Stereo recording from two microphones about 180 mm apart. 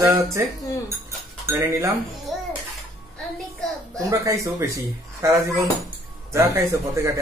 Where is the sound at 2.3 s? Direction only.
Centre (ahead or behind).